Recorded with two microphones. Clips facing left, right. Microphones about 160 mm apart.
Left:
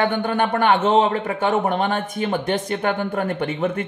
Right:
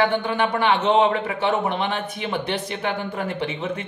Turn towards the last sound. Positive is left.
turn(degrees=55)  # may be behind; listen again after turning